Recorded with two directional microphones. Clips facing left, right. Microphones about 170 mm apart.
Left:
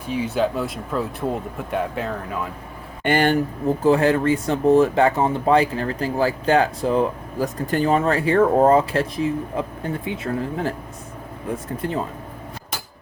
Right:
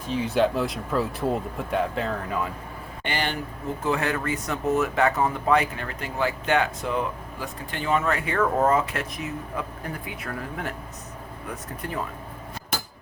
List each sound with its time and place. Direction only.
0.1 s speech: 5° left (ahead or behind)
3.0 s speech: 50° left (ahead or behind)
3.8 s speech: 30° left (ahead or behind)